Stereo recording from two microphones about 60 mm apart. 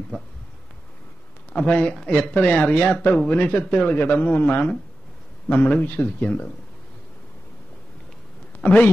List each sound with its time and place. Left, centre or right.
1.5 s speech: centre
8.5 s speech: left